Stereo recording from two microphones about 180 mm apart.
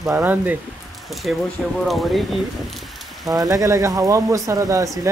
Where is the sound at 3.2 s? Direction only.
20° right (ahead or behind).